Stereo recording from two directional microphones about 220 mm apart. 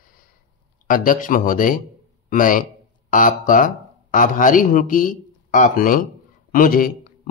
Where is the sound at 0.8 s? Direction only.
40° left (ahead or behind).